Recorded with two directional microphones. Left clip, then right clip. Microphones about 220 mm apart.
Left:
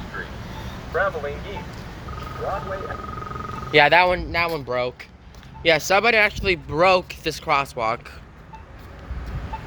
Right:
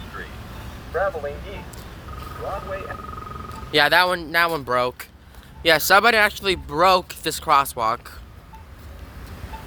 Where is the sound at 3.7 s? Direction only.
5° right (ahead or behind).